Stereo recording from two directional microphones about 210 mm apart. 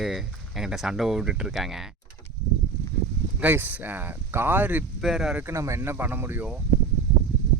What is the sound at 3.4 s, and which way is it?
Speech, 10° right (ahead or behind).